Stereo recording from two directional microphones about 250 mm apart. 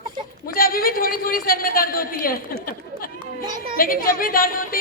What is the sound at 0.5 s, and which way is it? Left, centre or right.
A woman's voice, left.